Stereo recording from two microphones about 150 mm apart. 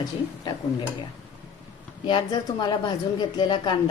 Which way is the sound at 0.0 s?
25° left (ahead or behind).